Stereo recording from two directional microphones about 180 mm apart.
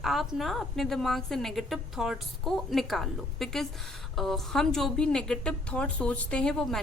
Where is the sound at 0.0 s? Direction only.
Centre (ahead or behind).